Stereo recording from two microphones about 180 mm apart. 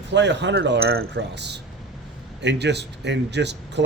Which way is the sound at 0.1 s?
80° right.